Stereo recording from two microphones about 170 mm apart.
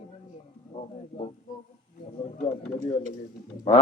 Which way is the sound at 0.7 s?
40° left (ahead or behind).